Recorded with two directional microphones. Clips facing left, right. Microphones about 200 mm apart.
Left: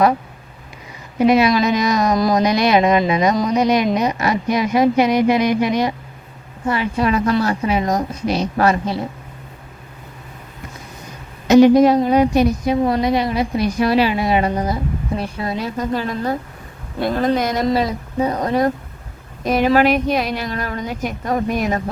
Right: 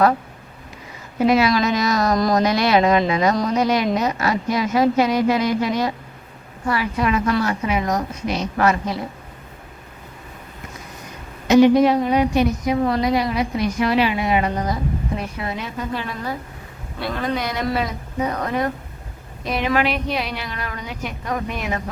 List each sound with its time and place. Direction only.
1.3 s speech: 20° left (ahead or behind)
2.1 s speech: 5° left (ahead or behind)
2.4 s speech: 15° left (ahead or behind)
6.7 s a woman's voice: 25° left (ahead or behind)
11.4 s a woman's voice: 40° left (ahead or behind)
12.8 s a woman's voice: 25° left (ahead or behind); by 17.7 s 45° left (ahead or behind)
17.7 s a woman's voice: 30° left (ahead or behind)